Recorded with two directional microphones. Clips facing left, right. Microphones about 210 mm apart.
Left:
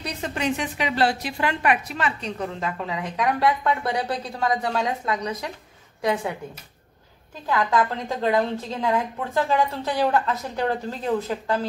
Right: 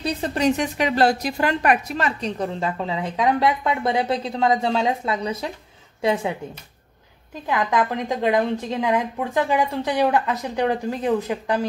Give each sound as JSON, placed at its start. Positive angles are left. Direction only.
{"t": 0.0, "sound": "a woman's voice", "side_deg": -35}
{"t": 7.4, "sound": "a woman's voice", "side_deg": -20}